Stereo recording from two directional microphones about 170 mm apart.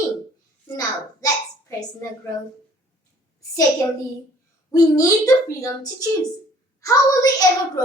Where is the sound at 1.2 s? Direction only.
20° left (ahead or behind).